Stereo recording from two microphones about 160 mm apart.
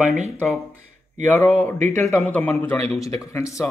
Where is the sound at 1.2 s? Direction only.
10° left (ahead or behind).